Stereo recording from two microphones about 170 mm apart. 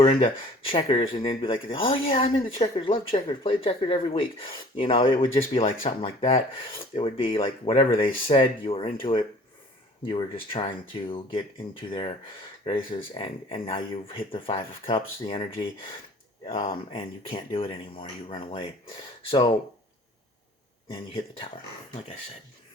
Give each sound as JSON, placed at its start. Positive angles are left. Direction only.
{"t": 0.0, "sound": "speech", "side_deg": 30}
{"t": 13.1, "sound": "speech", "side_deg": 35}
{"t": 20.9, "sound": "speech", "side_deg": 35}